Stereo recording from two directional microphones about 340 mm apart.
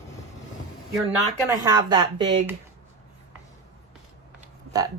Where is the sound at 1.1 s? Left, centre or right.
Centre.